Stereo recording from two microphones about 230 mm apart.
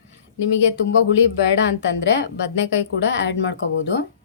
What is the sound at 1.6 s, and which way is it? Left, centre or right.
A woman's voice, left.